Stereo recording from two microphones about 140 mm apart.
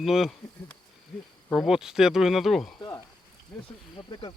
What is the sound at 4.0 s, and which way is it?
Speech, 35° left (ahead or behind).